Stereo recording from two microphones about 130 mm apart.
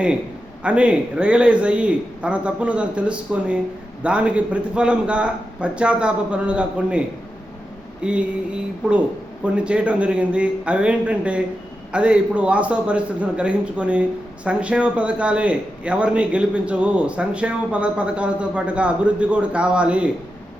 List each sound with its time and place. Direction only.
0.6 s a man's voice: 10° right (ahead or behind)
8.0 s a man's voice: 10° right (ahead or behind)